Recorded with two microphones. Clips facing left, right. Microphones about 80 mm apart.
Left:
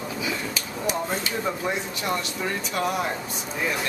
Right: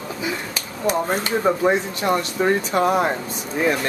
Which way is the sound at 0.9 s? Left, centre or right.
Right.